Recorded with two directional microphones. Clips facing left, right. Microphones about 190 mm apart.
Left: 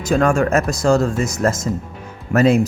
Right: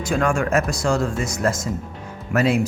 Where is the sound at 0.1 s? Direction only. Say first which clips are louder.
Left 5 dB; 40° left (ahead or behind).